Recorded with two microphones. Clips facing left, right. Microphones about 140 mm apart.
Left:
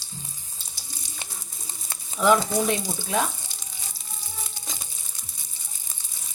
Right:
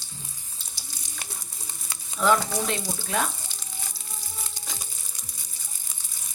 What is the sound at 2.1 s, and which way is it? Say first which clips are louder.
Speech: left 3 dB; 15° left (ahead or behind).